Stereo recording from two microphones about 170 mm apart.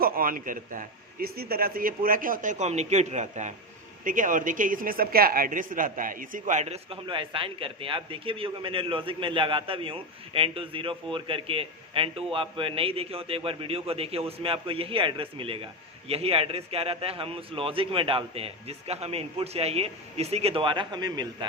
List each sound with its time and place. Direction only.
0.0 s a man's voice: 55° right (ahead or behind)
6.9 s a man's voice: 30° right (ahead or behind)